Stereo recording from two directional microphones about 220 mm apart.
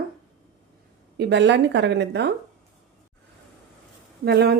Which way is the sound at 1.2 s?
50° right (ahead or behind).